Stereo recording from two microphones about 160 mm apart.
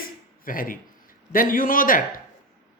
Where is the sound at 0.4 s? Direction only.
60° left (ahead or behind).